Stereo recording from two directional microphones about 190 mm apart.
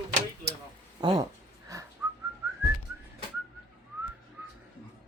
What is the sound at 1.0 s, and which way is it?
Speech, 20° right (ahead or behind).